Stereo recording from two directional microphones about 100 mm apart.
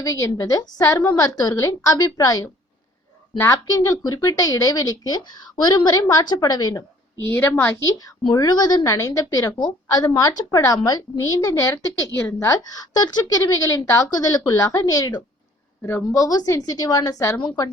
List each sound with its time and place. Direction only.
0.0 s speech: 35° left (ahead or behind)
3.3 s a woman's voice: 25° left (ahead or behind)
3.7 s speech: 35° left (ahead or behind)
7.3 s a woman's voice: 25° left (ahead or behind)
7.9 s a woman's voice: 40° left (ahead or behind)
8.8 s speech: 35° left (ahead or behind)